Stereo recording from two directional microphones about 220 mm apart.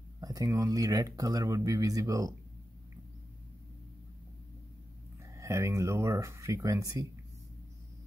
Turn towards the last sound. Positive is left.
turn(degrees=-15)  # may be behind; listen again after turning